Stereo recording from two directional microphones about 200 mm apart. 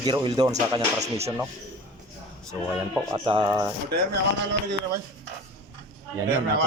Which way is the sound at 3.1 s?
20° right (ahead or behind).